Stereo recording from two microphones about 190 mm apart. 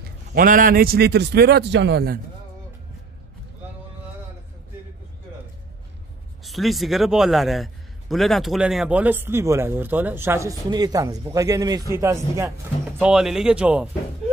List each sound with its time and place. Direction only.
0.3 s a man's voice: 45° right (ahead or behind)
6.4 s a man's voice: centre (ahead or behind); by 12.5 s 15° right (ahead or behind)
13.0 s speech: 5° right (ahead or behind)